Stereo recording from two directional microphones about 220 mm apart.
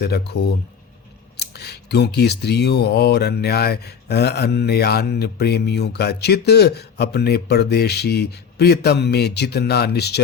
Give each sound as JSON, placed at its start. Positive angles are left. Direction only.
{"t": 0.0, "sound": "speech", "side_deg": 45}